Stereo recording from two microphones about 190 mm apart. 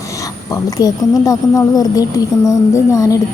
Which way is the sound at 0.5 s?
20° left (ahead or behind).